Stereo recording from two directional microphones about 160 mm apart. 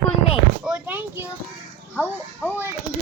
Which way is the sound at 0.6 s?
10° right (ahead or behind).